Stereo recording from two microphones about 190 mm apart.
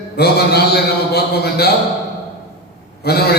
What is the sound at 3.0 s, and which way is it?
Speech, 55° left (ahead or behind).